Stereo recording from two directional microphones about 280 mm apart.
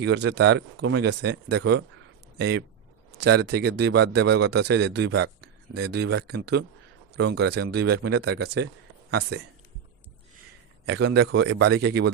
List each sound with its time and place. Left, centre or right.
0.0 s a man's voice: right
8.4 s speech: right
9.0 s speech: right
10.8 s a man's voice: right